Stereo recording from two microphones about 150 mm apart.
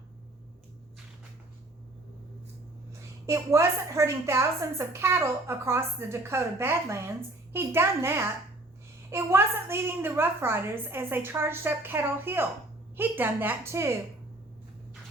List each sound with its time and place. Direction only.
3.2 s a woman's voice: 20° right (ahead or behind)